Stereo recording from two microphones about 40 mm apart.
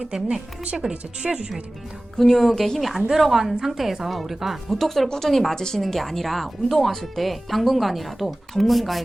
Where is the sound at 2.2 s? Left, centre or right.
Centre.